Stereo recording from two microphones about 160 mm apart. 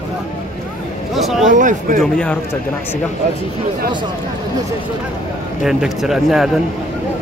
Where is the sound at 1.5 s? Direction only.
55° right (ahead or behind).